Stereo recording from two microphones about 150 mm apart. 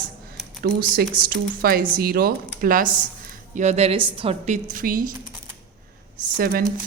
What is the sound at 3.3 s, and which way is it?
A woman's voice, 55° right (ahead or behind).